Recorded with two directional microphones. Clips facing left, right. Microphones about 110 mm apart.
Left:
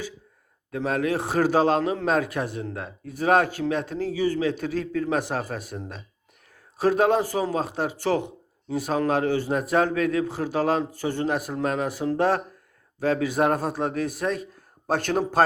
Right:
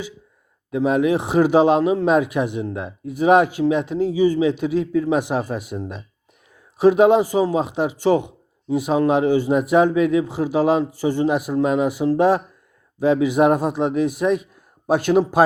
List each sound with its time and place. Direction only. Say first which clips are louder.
0.7 s a man's voice: right 7 dB; 15° right (ahead or behind)